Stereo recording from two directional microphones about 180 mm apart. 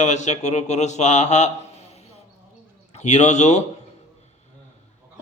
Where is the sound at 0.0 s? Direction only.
40° left (ahead or behind).